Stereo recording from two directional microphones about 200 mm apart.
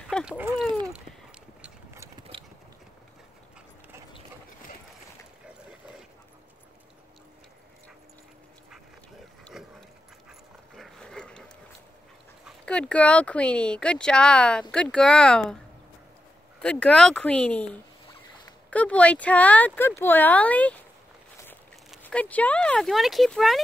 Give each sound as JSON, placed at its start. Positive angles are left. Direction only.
{"t": 0.1, "sound": "speech", "side_deg": -5}
{"t": 9.4, "sound": "a sound", "side_deg": 0}
{"t": 10.8, "sound": "dog", "side_deg": 5}
{"t": 12.4, "sound": "speech", "side_deg": 5}
{"t": 16.6, "sound": "speech", "side_deg": 5}
{"t": 18.7, "sound": "speech", "side_deg": 5}
{"t": 22.0, "sound": "speech", "side_deg": 5}